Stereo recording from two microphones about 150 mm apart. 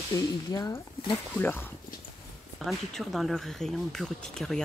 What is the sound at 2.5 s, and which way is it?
Speech, centre (ahead or behind).